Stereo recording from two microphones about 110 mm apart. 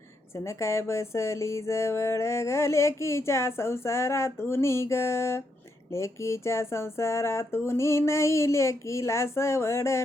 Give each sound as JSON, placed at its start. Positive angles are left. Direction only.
{"t": 0.3, "sound": "speech", "side_deg": 25}